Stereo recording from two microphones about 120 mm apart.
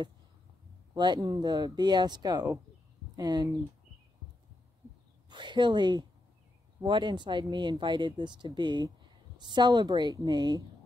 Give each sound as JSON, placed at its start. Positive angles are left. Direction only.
{"t": 0.9, "sound": "speech", "side_deg": -40}
{"t": 5.3, "sound": "speech", "side_deg": -40}